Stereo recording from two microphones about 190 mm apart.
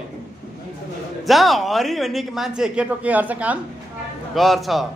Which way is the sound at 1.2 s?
Centre (ahead or behind).